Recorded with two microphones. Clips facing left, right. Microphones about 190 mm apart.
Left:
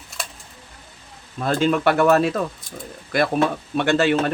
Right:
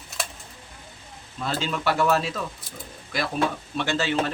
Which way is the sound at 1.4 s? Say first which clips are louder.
Left 9 dB; 50° left (ahead or behind).